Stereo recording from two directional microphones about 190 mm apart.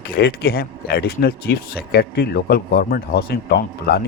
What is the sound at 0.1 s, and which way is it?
Speech, 55° left (ahead or behind).